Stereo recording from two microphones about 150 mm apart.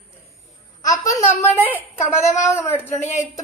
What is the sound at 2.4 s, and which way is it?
Speech, 15° left (ahead or behind).